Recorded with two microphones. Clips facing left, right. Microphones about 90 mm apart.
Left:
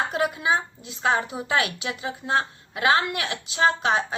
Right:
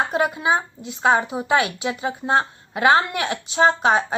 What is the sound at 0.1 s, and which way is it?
A woman's voice, 25° right (ahead or behind).